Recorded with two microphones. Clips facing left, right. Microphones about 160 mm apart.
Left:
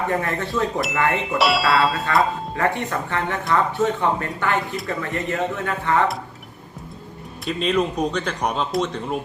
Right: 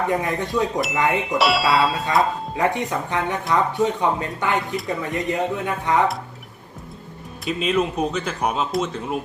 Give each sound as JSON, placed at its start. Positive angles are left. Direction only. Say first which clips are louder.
{"t": 0.1, "sound": "speech", "louder": "right 1 dB", "side_deg": -15}
{"t": 1.4, "sound": "speech", "louder": "even", "side_deg": 0}
{"t": 2.6, "sound": "speech", "louder": "right 1 dB", "side_deg": -15}
{"t": 7.4, "sound": "speech", "louder": "even", "side_deg": -5}